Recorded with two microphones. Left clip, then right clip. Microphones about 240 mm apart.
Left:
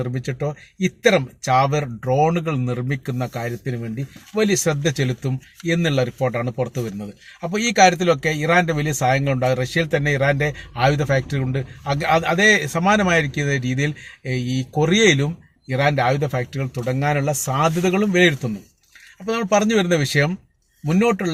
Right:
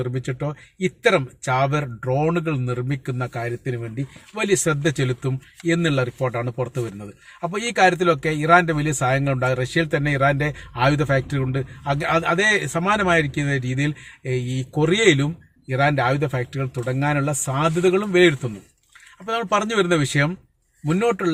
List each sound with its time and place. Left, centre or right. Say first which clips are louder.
0.0 s speech: left 1 dB; centre
7.8 s speech: left 2 dB; centre